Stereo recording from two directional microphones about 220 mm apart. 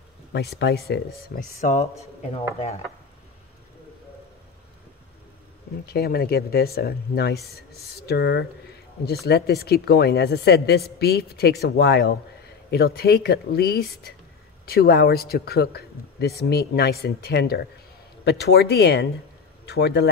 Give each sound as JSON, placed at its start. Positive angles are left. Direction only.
{"t": 0.3, "sound": "speech", "side_deg": 50}
{"t": 5.9, "sound": "speech", "side_deg": 45}